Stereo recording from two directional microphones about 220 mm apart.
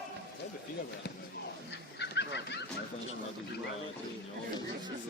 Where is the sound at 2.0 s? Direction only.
50° left (ahead or behind).